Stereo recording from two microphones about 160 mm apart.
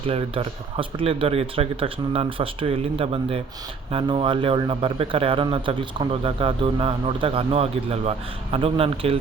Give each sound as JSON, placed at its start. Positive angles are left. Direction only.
{"t": 0.1, "sound": "speech", "side_deg": -35}